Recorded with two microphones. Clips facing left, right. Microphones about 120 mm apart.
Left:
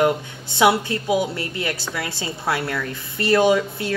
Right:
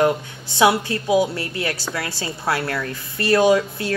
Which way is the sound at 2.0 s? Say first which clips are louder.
Even; 20° left (ahead or behind).